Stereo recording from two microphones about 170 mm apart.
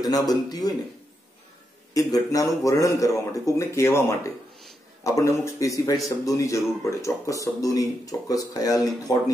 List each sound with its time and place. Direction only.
0.3 s speech: 20° left (ahead or behind)
2.0 s speech: 20° left (ahead or behind)